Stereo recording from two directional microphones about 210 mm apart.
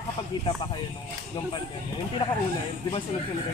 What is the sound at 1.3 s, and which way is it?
Speech, 20° left (ahead or behind).